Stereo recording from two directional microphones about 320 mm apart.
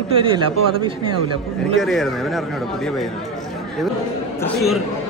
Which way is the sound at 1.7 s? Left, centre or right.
Centre.